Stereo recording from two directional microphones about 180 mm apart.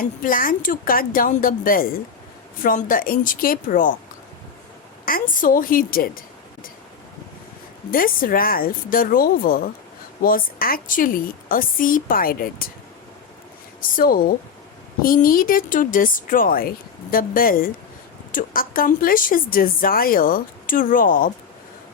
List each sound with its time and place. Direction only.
0.0 s speech: 50° left (ahead or behind)
5.0 s speech: 50° left (ahead or behind)
7.9 s speech: 50° left (ahead or behind)
13.9 s speech: 55° left (ahead or behind)